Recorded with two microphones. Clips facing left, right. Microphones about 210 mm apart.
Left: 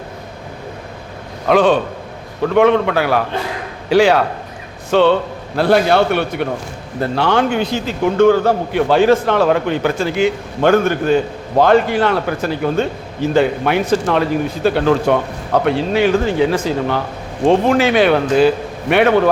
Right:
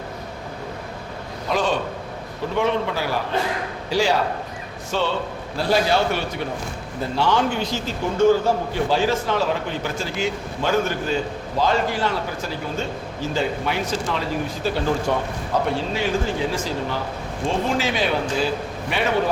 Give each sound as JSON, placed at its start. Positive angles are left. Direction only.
{"t": 1.5, "sound": "a man's voice", "side_deg": 60}